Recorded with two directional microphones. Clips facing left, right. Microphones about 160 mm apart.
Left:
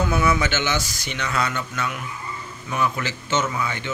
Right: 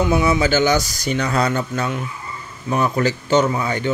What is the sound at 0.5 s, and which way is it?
Speech, 40° right (ahead or behind).